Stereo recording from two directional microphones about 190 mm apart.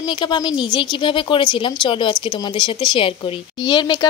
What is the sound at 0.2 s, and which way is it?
Speech, 25° left (ahead or behind).